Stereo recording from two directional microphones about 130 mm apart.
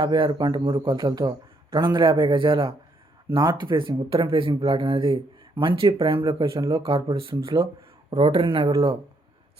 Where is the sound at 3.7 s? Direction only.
40° right (ahead or behind).